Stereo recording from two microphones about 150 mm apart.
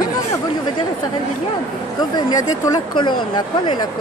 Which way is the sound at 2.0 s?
25° left (ahead or behind).